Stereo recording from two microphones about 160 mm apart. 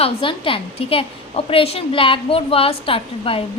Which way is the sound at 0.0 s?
35° left (ahead or behind).